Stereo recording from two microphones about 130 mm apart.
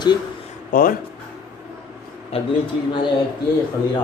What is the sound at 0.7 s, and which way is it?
Speech, 90° left.